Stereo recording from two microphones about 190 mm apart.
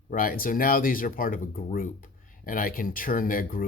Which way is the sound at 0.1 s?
50° left (ahead or behind).